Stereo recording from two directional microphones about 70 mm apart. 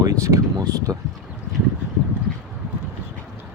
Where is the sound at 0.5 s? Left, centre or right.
Right.